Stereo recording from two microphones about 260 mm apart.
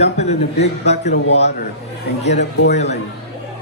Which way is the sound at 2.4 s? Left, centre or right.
Left.